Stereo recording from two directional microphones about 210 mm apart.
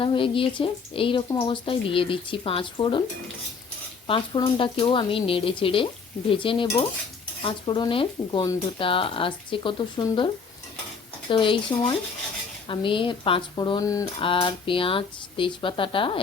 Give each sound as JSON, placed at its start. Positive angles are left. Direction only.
{"t": 0.0, "sound": "speech", "side_deg": 25}
{"t": 4.0, "sound": "speech", "side_deg": 25}
{"t": 11.3, "sound": "speech", "side_deg": 25}